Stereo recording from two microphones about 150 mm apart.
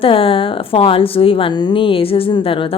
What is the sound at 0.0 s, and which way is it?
A woman's voice, 40° left (ahead or behind).